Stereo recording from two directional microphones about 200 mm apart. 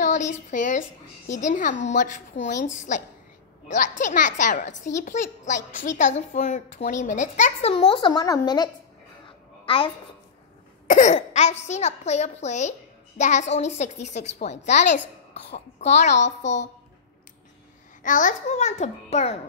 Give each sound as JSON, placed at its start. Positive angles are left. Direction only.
{"t": 0.0, "sound": "a woman's voice", "side_deg": 35}
{"t": 7.7, "sound": "speech", "side_deg": 25}
{"t": 10.9, "sound": "a woman's voice", "side_deg": 35}
{"t": 18.0, "sound": "a woman's voice", "side_deg": 40}